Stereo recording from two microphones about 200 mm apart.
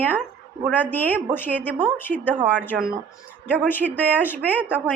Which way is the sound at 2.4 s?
10° right (ahead or behind).